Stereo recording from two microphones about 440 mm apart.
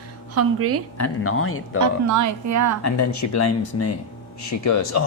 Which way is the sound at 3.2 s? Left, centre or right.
Left.